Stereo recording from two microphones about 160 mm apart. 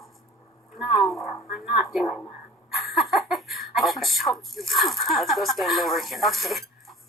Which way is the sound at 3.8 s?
Centre (ahead or behind).